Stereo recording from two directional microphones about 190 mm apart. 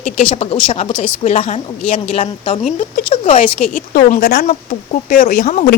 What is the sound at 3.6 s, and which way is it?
A woman's voice, 45° left (ahead or behind).